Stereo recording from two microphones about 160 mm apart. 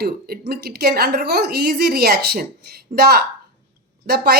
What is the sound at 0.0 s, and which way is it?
A woman's voice, 70° right (ahead or behind).